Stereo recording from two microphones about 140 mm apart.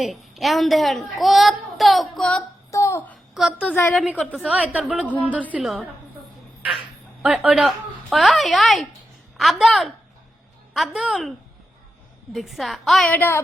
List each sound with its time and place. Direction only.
0.0 s a woman's voice: centre (ahead or behind)
2.7 s a sound: 20° left (ahead or behind)
3.6 s a woman's voice: 10° left (ahead or behind)
3.9 s a woman's voice: 10° right (ahead or behind)
7.2 s a woman's voice: 5° right (ahead or behind)
13.1 s a woman's voice: 15° left (ahead or behind)